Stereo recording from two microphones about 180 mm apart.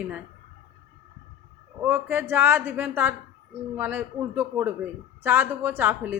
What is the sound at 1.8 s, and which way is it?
Speech, 10° right (ahead or behind).